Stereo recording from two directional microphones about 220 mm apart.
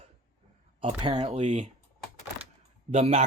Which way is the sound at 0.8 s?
25° right (ahead or behind).